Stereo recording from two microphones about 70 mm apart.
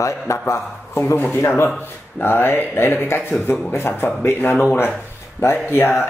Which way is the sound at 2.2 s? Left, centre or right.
Left.